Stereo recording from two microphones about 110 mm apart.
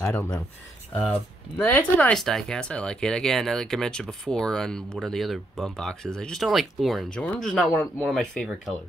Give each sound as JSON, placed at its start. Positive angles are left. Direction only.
{"t": 0.0, "sound": "speech", "side_deg": 20}
{"t": 1.6, "sound": "speech", "side_deg": 15}
{"t": 2.1, "sound": "speech", "side_deg": 5}
{"t": 7.1, "sound": "speech", "side_deg": 10}